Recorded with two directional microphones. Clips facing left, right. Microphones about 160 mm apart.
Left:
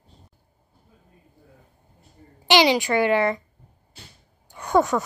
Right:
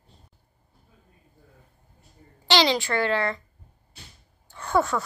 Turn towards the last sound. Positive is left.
turn(degrees=15)  # may be behind; listen again after turning